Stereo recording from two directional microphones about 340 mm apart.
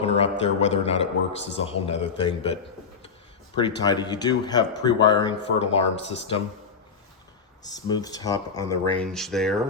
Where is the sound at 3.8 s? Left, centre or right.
Centre.